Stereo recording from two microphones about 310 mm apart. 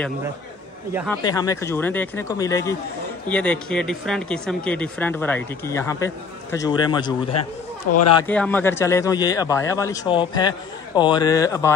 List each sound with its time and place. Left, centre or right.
1.2 s a man's voice: centre
7.9 s speech: left
8.2 s a man's voice: centre